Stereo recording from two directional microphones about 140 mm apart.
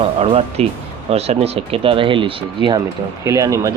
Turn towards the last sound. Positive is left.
turn(degrees=-25)  # may be behind; listen again after turning